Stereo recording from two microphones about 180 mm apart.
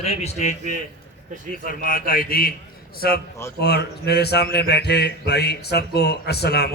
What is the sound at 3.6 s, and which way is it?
A man's voice, 65° left (ahead or behind).